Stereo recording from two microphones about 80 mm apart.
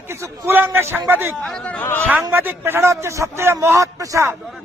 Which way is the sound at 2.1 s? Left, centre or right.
Right.